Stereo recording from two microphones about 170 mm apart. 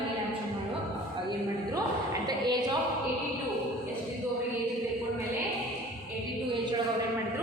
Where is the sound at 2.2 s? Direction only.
25° right (ahead or behind).